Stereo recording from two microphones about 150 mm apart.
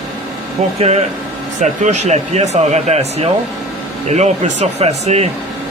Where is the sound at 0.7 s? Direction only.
45° right (ahead or behind).